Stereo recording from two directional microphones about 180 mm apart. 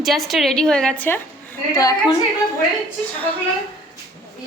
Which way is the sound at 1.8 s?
20° left (ahead or behind).